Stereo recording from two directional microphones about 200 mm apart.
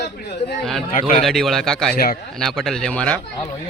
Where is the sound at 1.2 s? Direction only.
Centre (ahead or behind).